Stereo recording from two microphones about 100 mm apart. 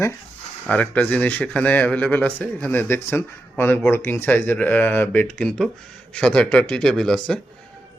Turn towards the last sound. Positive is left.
turn(degrees=5)  # may be behind; listen again after turning